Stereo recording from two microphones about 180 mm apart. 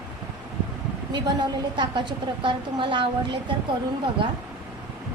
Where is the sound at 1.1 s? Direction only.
25° right (ahead or behind).